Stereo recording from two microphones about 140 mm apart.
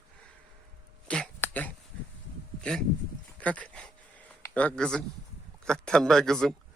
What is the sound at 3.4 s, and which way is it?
Speech, 10° left (ahead or behind).